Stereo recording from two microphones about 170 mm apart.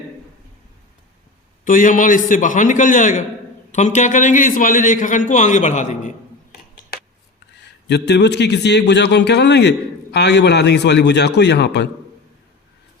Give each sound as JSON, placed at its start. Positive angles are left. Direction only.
{"t": 1.6, "sound": "a man's voice", "side_deg": 50}
{"t": 7.9, "sound": "a man's voice", "side_deg": 85}